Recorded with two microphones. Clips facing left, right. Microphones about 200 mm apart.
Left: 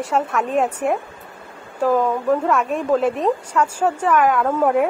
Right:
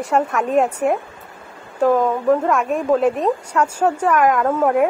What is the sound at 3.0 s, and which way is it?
Speech, 35° right (ahead or behind).